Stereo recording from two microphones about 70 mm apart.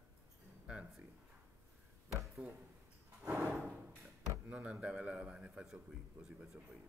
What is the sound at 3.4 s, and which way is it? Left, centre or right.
Drawer open or close, right.